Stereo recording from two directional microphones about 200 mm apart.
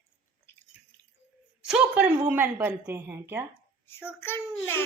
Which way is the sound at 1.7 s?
5° right (ahead or behind).